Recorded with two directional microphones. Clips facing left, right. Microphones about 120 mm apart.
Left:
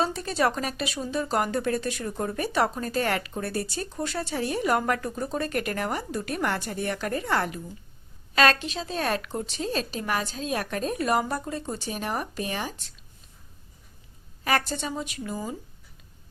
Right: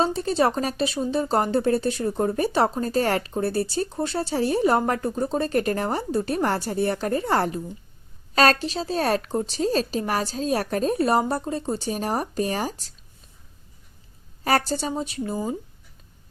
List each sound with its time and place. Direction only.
0.0 s speech: 30° right (ahead or behind)
14.4 s speech: 35° right (ahead or behind)